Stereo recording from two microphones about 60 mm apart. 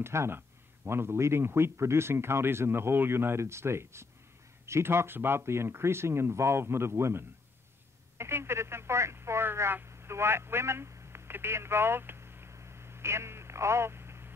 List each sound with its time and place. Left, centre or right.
0.0 s speech: right